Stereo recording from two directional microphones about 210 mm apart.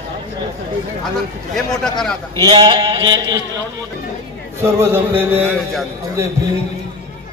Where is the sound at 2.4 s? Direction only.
20° right (ahead or behind).